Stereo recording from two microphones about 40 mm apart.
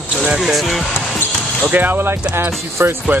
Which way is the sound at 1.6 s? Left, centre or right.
Right.